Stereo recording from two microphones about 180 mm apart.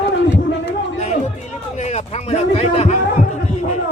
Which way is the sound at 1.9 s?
35° left (ahead or behind).